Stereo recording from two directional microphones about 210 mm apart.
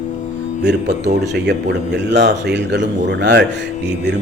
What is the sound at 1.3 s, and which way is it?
Speech, 55° right (ahead or behind).